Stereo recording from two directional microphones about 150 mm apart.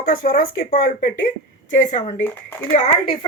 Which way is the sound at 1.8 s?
50° left (ahead or behind).